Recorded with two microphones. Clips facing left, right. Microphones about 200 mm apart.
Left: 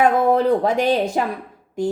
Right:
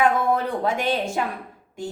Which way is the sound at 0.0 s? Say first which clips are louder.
Left 5 dB; 40° left (ahead or behind).